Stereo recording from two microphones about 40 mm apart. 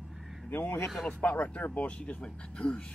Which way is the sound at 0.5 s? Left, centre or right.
Left.